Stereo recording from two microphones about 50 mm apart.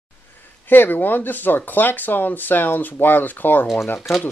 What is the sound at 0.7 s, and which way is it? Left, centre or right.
Speech, left.